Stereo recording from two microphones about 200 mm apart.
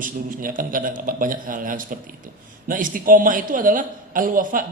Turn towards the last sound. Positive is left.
turn(degrees=-40)  # may be behind; listen again after turning